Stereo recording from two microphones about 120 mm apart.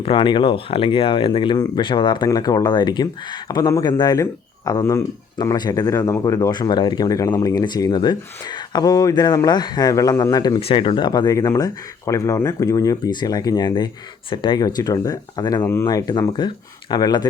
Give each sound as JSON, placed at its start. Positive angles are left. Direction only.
{"t": 0.0, "sound": "speech", "side_deg": 45}
{"t": 10.6, "sound": "speech", "side_deg": 50}
{"t": 15.6, "sound": "speech", "side_deg": 25}